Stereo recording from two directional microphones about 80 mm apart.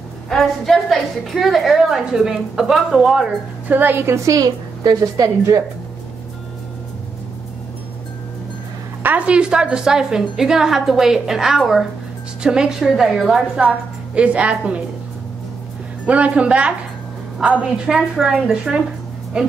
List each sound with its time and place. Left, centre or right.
0.3 s a woman's voice: centre
3.6 s a woman's voice: right
4.3 s a woman's voice: right
9.0 s a woman's voice: centre
16.1 s a woman's voice: centre